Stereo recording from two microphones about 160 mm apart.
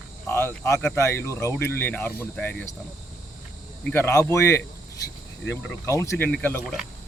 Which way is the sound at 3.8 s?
10° left (ahead or behind).